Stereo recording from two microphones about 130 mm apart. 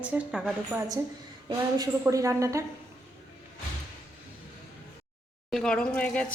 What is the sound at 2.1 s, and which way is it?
Speech, 25° right (ahead or behind).